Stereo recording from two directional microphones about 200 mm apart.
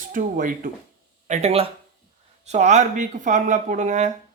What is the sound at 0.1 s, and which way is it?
Speech, 40° right (ahead or behind).